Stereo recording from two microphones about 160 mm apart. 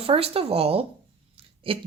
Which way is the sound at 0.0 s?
35° right (ahead or behind).